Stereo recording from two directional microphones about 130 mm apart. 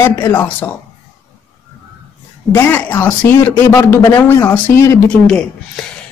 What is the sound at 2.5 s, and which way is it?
A man's voice, 15° left (ahead or behind).